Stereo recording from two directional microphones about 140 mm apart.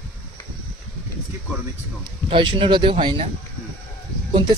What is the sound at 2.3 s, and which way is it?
Speech, 35° right (ahead or behind).